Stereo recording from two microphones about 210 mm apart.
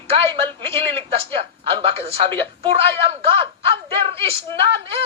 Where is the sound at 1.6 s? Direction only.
25° right (ahead or behind).